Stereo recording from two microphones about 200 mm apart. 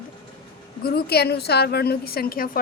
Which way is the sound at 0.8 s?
50° left (ahead or behind).